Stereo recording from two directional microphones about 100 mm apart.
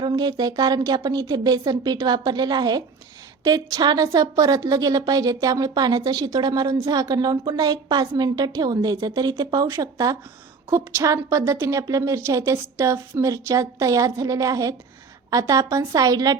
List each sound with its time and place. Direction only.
0.0 s a woman's voice: 45° right (ahead or behind)